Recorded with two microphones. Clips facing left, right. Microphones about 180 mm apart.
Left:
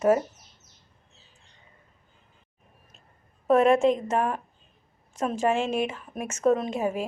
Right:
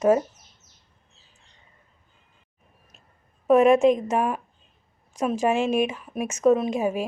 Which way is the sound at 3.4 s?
10° right (ahead or behind).